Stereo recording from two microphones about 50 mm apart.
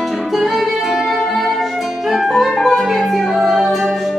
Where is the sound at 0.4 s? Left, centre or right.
Centre.